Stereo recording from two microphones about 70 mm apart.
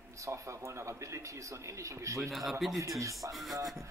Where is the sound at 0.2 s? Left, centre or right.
Right.